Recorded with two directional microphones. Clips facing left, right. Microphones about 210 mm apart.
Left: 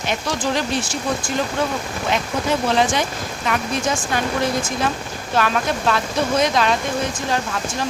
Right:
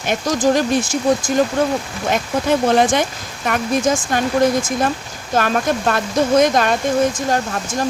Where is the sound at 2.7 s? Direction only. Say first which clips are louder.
Right 4 dB; 55° right (ahead or behind).